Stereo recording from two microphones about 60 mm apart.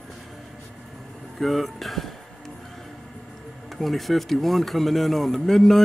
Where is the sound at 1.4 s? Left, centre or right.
Centre.